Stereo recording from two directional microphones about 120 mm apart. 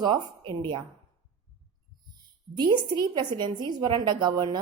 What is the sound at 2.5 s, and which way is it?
A woman's voice, 35° right (ahead or behind).